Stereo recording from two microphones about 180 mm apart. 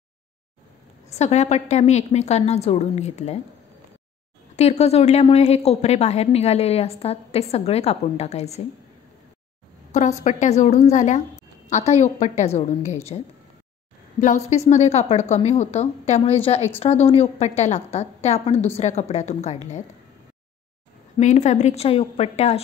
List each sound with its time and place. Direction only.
1.1 s a woman's voice: 40° left (ahead or behind)
4.6 s a woman's voice: 35° left (ahead or behind)
10.2 s a woman's voice: 40° left (ahead or behind)
14.2 s a woman's voice: 40° left (ahead or behind)
21.2 s a woman's voice: 40° left (ahead or behind)